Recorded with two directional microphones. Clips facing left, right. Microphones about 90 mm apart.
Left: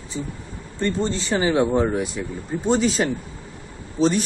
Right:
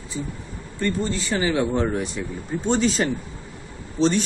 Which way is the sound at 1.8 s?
10° left (ahead or behind).